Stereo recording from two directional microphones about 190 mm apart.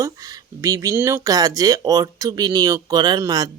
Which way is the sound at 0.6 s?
15° right (ahead or behind).